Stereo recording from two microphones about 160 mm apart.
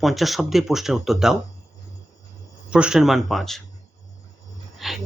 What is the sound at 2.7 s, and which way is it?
Speech, 5° right (ahead or behind).